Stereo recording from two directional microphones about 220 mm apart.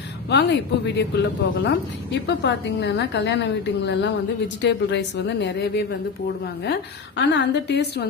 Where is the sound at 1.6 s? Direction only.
55° left (ahead or behind).